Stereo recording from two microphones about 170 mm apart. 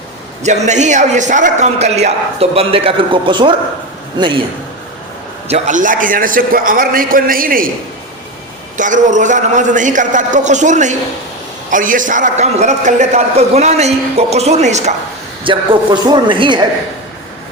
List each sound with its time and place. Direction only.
0.4 s a man's voice: 45° right (ahead or behind)
5.5 s a man's voice: 40° right (ahead or behind)
8.8 s a man's voice: 50° right (ahead or behind)
15.4 s a man's voice: 30° right (ahead or behind)